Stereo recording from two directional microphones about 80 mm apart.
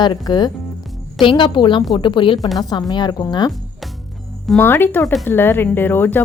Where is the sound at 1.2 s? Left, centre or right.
Left.